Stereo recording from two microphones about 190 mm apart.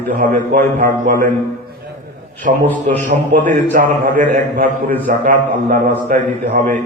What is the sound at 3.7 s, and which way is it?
A man's voice, 45° right (ahead or behind).